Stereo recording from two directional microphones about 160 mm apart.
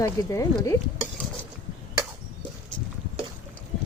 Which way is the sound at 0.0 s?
20° left (ahead or behind).